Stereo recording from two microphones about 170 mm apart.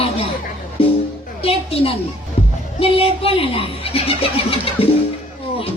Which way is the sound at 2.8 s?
35° left (ahead or behind).